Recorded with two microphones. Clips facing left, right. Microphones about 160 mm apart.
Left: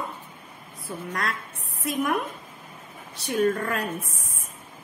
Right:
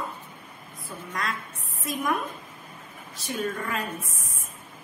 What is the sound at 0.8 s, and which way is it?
Speech, 70° left (ahead or behind).